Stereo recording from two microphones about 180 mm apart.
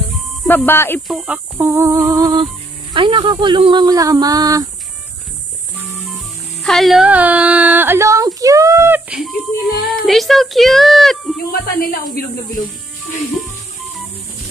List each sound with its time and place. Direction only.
0.5 s speech: 10° left (ahead or behind)
1.0 s a sound: 5° right (ahead or behind)
2.9 s speech: 25° right (ahead or behind)
6.1 s music: centre (ahead or behind); by 8.3 s 15° right (ahead or behind)
8.4 s speech: 20° right (ahead or behind); by 11.3 s centre (ahead or behind)
11.8 s speech: 50° left (ahead or behind)